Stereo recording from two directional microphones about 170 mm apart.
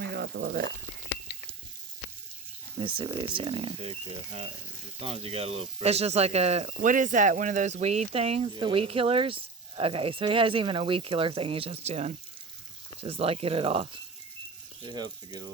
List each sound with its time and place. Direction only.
0.0 s frying: 70° right (ahead or behind)
2.7 s speech: 30° right (ahead or behind)